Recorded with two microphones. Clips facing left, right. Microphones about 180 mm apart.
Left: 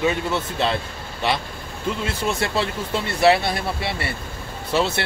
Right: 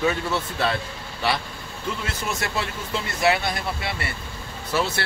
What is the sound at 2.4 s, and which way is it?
Speech, 30° left (ahead or behind).